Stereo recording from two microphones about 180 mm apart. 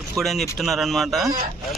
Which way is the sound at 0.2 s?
Centre (ahead or behind).